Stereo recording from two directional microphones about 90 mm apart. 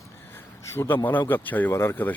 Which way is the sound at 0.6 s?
30° left (ahead or behind).